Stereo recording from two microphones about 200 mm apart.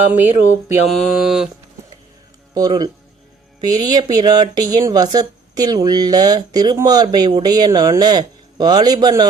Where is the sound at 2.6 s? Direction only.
20° right (ahead or behind).